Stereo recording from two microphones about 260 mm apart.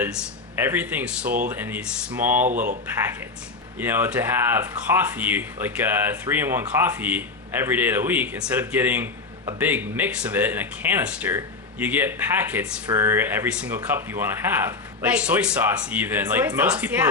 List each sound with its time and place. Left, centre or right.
0.6 s speech: centre
2.5 s speech: right
3.8 s speech: centre